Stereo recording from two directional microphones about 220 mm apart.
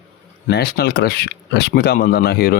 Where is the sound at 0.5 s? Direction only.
45° left (ahead or behind).